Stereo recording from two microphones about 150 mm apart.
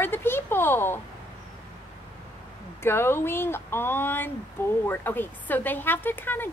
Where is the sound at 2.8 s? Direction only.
15° left (ahead or behind).